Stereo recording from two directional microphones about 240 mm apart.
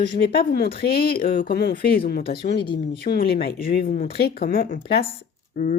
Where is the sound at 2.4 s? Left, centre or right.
Centre.